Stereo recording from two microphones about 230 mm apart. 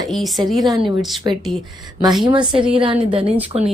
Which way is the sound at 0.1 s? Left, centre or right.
Centre.